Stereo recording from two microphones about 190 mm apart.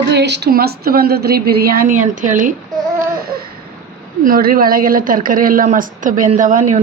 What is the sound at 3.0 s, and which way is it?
Baby cry, 50° right (ahead or behind).